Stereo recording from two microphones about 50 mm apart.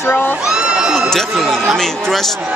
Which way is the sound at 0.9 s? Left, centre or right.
Centre.